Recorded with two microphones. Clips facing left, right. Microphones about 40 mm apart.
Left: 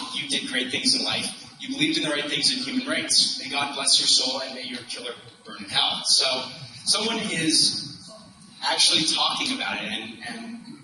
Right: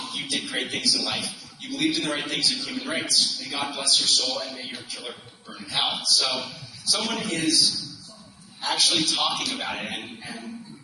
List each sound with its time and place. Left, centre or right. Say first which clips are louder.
0.0 s a sound: left 1 dB; left
0.3 s a man's voice: left 2 dB; left
8.6 s a man's voice: left 1 dB; left